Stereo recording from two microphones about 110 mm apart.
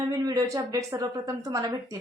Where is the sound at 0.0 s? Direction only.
30° right (ahead or behind).